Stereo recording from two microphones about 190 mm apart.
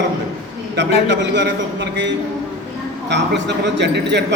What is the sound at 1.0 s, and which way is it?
Speech, 70° right (ahead or behind).